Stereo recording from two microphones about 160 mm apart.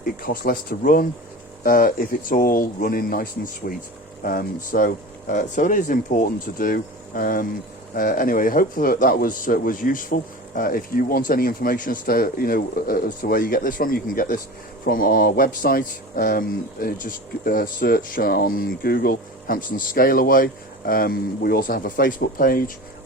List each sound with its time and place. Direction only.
0.2 s speech: 65° left (ahead or behind)